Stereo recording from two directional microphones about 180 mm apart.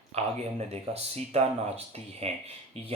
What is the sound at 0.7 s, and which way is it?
Speech, 35° right (ahead or behind).